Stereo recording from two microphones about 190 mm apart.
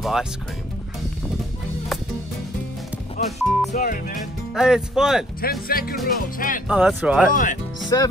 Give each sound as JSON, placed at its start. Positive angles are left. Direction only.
{"t": 0.0, "sound": "speech", "side_deg": 0}
{"t": 3.3, "sound": "speech", "side_deg": 0}
{"t": 3.7, "sound": "speech", "side_deg": 45}
{"t": 4.6, "sound": "speech", "side_deg": -5}
{"t": 5.4, "sound": "speech", "side_deg": 50}
{"t": 6.7, "sound": "speech", "side_deg": -5}
{"t": 7.2, "sound": "speech", "side_deg": 45}
{"t": 7.9, "sound": "speech", "side_deg": 15}